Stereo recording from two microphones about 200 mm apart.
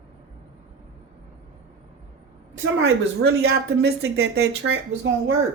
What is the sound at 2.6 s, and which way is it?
Speech, 75° right (ahead or behind).